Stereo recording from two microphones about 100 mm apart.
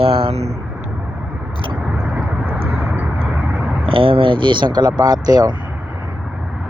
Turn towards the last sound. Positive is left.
turn(degrees=-40)  # may be behind; listen again after turning